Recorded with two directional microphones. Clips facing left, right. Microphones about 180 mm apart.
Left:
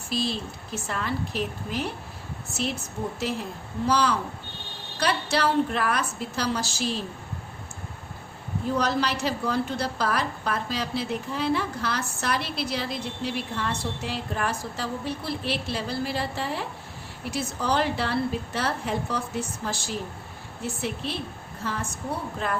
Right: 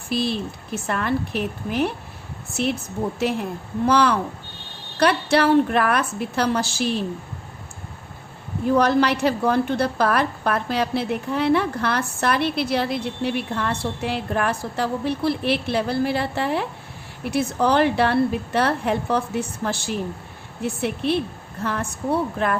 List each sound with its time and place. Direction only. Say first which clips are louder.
0.1 s a woman's voice: right 5 dB; 60° right (ahead or behind)
3.2 s a woman's voice: right 6 dB; 60° right (ahead or behind)
8.6 s a woman's voice: right 8 dB; 60° right (ahead or behind)